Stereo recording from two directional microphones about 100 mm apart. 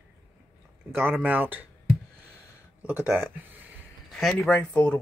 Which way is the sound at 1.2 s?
20° right (ahead or behind).